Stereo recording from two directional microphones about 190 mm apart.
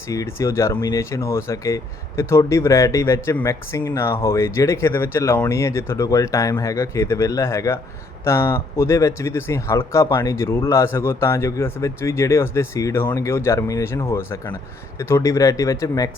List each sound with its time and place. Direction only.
0.1 s speech: 15° left (ahead or behind)